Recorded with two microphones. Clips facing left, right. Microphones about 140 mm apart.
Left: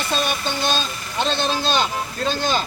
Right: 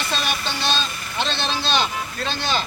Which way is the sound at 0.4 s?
45° left (ahead or behind).